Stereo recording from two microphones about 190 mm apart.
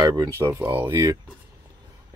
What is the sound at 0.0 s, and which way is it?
Speech, 20° right (ahead or behind).